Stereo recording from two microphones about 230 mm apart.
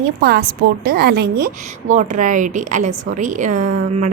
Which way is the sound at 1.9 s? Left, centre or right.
Right.